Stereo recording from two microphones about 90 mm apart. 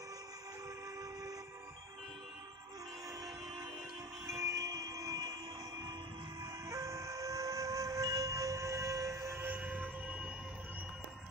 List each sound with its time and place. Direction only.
4.3 s train: 40° right (ahead or behind)
6.4 s train: 40° right (ahead or behind)
9.6 s train: 15° right (ahead or behind)